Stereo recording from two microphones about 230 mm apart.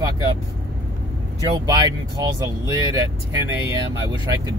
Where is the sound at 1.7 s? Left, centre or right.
Centre.